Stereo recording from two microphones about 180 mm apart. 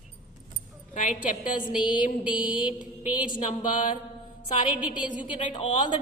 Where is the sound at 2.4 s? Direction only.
25° left (ahead or behind).